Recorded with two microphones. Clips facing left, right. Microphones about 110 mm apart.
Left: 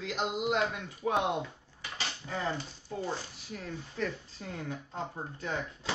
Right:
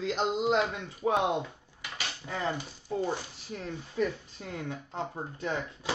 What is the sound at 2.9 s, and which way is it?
Speech, 15° right (ahead or behind).